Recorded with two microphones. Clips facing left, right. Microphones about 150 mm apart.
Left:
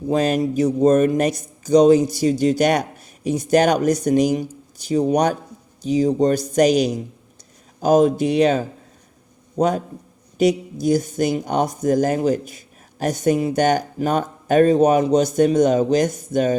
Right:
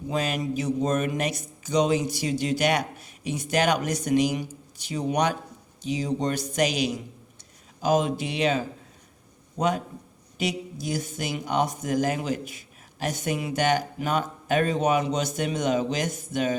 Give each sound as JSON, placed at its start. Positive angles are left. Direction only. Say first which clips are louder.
{"t": 0.1, "sound": "a man's voice", "louder": "left 9 dB", "side_deg": 40}